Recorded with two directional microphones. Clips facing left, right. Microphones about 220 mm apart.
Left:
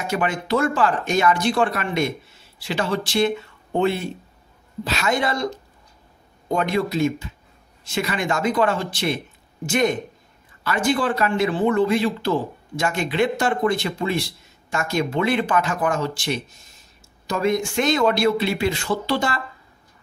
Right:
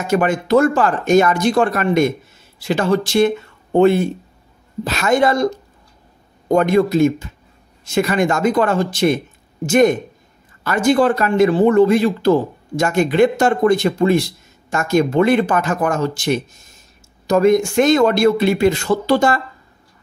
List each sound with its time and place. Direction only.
0.0 s speech: 45° right (ahead or behind)
6.5 s speech: 45° right (ahead or behind)